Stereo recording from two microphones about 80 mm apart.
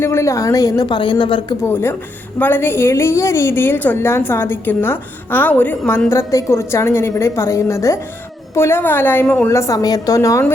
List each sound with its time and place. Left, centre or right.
0.0 s a woman's voice: left
0.9 s a woman's voice: left
1.6 s a woman's voice: left
6.1 s a woman's voice: left
9.5 s a woman's voice: left